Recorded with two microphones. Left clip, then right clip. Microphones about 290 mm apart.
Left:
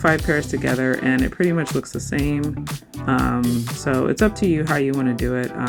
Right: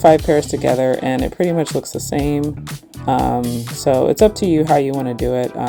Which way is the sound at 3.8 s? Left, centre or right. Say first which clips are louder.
Right 8 dB; centre.